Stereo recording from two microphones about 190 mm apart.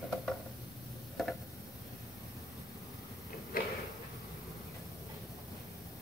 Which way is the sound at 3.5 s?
50° left (ahead or behind).